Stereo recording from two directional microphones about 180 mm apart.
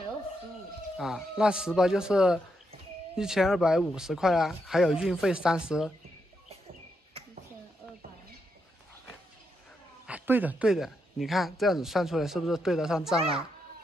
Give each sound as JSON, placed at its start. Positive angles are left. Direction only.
{"t": 0.9, "sound": "speech", "side_deg": 0}
{"t": 10.0, "sound": "speech", "side_deg": -10}